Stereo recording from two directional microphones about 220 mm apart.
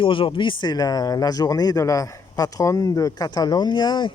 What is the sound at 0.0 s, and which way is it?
Speech, 25° left (ahead or behind).